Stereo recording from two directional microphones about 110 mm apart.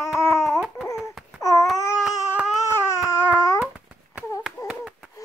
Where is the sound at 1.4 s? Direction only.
30° left (ahead or behind).